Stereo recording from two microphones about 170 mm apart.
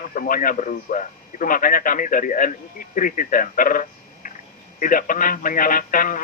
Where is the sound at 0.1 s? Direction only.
55° left (ahead or behind).